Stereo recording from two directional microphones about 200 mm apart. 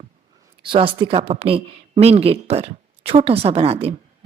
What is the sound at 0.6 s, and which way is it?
Speech, 25° right (ahead or behind).